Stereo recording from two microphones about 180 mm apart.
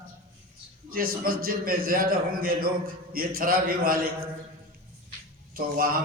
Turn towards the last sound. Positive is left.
turn(degrees=-50)  # may be behind; listen again after turning